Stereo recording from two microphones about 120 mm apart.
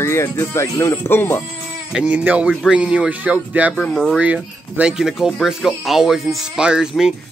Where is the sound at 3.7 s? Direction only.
5° left (ahead or behind).